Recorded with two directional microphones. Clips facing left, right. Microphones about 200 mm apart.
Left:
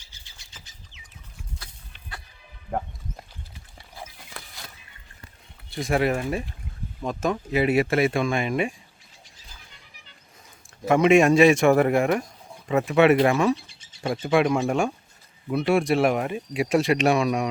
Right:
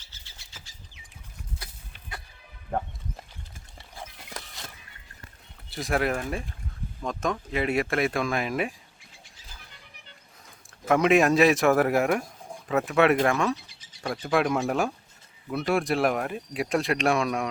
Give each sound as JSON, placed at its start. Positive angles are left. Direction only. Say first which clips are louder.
{"t": 0.0, "sound": "vehicle", "louder": "even", "side_deg": 15}
{"t": 2.6, "sound": "a sound", "louder": "left 1 dB", "side_deg": 5}
{"t": 4.4, "sound": "fowl", "louder": "right 1 dB", "side_deg": -40}
{"t": 5.7, "sound": "speech", "louder": "left 3 dB", "side_deg": 0}
{"t": 10.8, "sound": "speech", "louder": "left 3 dB", "side_deg": 0}
{"t": 13.7, "sound": "a sound", "louder": "left 4 dB", "side_deg": 25}
{"t": 14.1, "sound": "speech", "louder": "left 4 dB", "side_deg": 0}